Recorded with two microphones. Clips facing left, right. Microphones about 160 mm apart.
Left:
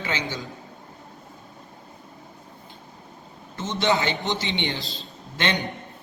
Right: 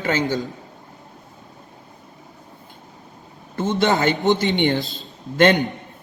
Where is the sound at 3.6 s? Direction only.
50° right (ahead or behind).